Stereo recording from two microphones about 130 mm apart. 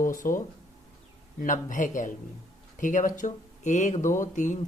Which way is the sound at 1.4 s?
85° left.